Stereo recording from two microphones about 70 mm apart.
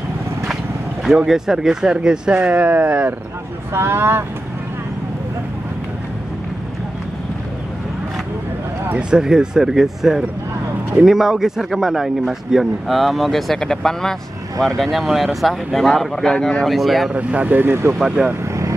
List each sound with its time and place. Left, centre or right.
1.0 s speech: centre
3.7 s speech: right
9.1 s a man's voice: centre
17.1 s speech: centre
18.2 s speech: centre